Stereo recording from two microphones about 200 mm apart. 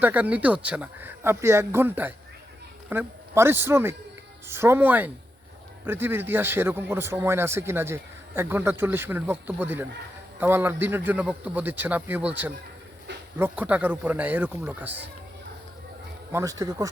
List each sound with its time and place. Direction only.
0.0 s a man's voice: 10° right (ahead or behind)
16.3 s speech: 15° right (ahead or behind)